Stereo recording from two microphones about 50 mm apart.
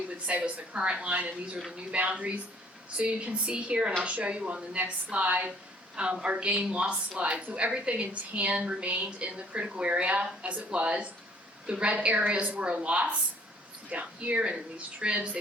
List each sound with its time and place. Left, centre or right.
0.3 s a woman's voice: right